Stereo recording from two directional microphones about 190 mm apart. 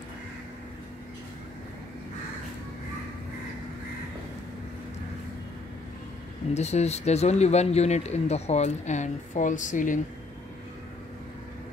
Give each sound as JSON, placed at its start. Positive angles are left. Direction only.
{"t": 6.5, "sound": "speech", "side_deg": 35}